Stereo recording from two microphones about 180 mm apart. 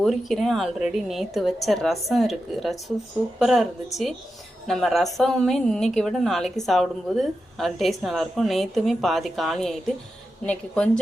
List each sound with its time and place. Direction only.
0.0 s a woman's voice: centre (ahead or behind)